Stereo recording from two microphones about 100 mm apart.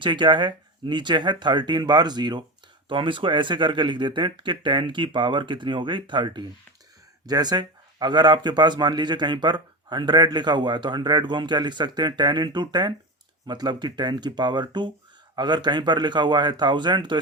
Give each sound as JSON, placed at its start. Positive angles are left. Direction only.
{"t": 0.0, "sound": "speech", "side_deg": -50}
{"t": 2.9, "sound": "speech", "side_deg": -55}